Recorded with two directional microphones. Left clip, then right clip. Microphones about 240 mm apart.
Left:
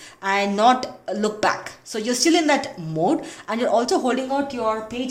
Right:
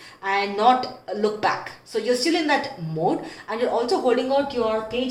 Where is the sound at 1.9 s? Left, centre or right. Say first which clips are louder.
Left 2 dB; left.